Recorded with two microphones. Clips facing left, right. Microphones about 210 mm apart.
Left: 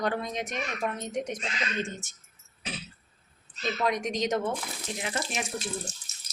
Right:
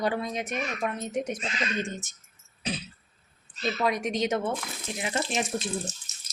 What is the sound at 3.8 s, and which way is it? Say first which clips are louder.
Speech: right 1 dB; 5° right (ahead or behind).